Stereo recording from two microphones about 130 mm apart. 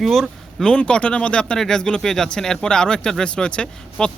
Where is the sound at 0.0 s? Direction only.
Centre (ahead or behind).